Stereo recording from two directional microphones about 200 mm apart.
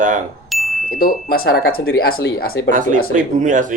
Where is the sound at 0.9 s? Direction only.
45° left (ahead or behind).